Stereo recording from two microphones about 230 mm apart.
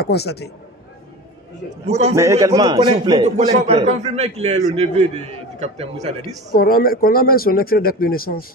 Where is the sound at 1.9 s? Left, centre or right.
Right.